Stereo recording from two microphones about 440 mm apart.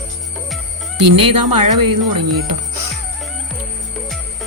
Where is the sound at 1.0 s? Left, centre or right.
Right.